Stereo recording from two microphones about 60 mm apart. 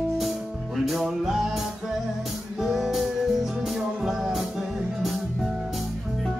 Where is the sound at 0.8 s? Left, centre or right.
Centre.